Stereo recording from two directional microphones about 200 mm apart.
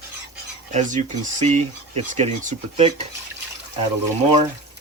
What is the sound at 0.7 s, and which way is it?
Speech, 40° right (ahead or behind).